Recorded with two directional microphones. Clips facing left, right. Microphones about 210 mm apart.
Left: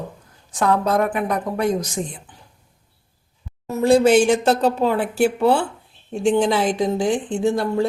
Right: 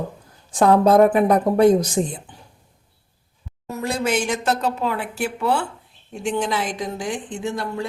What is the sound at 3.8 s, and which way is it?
A woman's voice, 30° left (ahead or behind).